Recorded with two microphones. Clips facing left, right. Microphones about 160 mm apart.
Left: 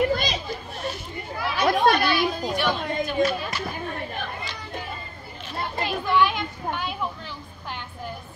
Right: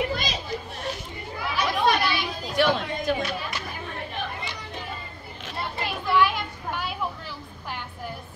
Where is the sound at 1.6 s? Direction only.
50° left (ahead or behind).